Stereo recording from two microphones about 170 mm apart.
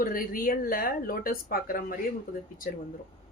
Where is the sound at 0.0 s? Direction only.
55° left (ahead or behind).